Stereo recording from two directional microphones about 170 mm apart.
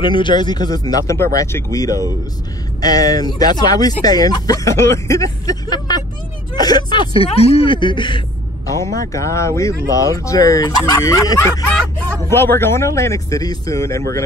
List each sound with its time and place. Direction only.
0.0 s speech: 25° left (ahead or behind)